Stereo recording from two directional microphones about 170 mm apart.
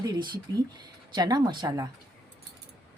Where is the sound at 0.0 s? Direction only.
25° right (ahead or behind).